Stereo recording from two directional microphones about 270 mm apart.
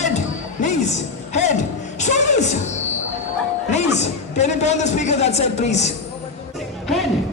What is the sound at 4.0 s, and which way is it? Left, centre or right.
Speech, left.